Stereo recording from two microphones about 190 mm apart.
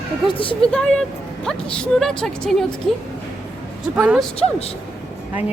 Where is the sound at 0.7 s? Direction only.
5° left (ahead or behind).